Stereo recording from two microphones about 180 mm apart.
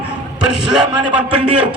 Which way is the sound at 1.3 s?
30° right (ahead or behind).